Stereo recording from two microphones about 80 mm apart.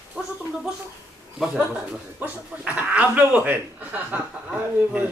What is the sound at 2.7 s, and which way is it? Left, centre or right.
Speech, centre.